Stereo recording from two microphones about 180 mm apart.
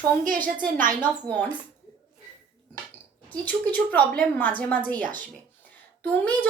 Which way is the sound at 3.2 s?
10° left (ahead or behind).